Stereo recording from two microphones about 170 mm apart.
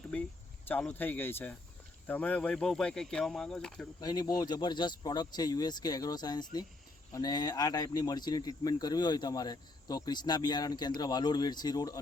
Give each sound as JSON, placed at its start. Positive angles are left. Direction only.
{"t": 0.1, "sound": "cricket", "side_deg": 10}
{"t": 0.7, "sound": "speech", "side_deg": 10}
{"t": 4.0, "sound": "speech", "side_deg": 25}